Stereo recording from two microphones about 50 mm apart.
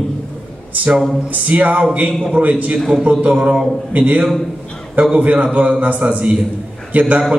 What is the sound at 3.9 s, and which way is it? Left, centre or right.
A man's voice, right.